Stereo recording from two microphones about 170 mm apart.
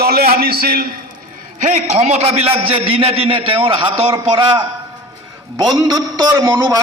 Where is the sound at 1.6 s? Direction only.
40° right (ahead or behind).